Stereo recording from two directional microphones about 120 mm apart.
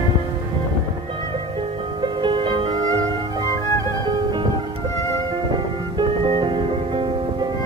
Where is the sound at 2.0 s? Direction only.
40° right (ahead or behind).